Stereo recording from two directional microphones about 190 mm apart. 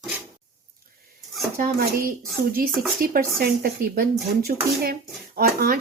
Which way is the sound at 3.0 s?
50° right (ahead or behind).